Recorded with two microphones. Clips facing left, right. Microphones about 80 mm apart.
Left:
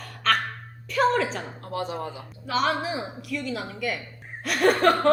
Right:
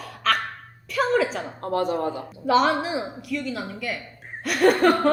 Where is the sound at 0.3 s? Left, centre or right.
Centre.